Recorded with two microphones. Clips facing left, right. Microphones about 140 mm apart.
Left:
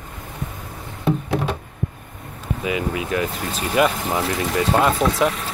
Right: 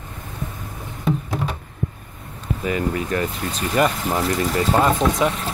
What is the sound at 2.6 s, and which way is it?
Speech, 10° left (ahead or behind).